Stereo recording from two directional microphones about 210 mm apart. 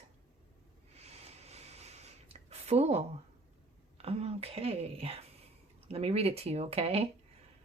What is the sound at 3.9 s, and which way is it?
Speech, 30° right (ahead or behind).